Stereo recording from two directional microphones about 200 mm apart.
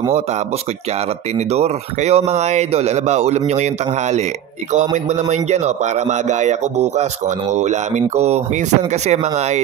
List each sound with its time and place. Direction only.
1.5 s speech: 35° right (ahead or behind)